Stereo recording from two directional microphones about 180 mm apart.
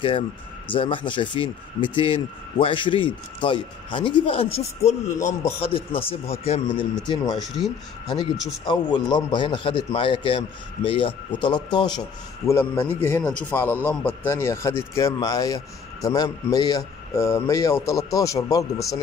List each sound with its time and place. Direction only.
0.7 s speech: 25° left (ahead or behind)
7.4 s speech: centre (ahead or behind)
8.8 s speech: 25° left (ahead or behind)
12.4 s speech: 10° left (ahead or behind)